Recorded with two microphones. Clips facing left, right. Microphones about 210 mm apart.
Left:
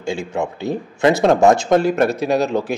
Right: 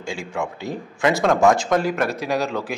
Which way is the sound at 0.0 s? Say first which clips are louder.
Left 5 dB; 25° left (ahead or behind).